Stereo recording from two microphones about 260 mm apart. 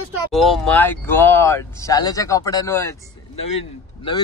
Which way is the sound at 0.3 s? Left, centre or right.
Centre.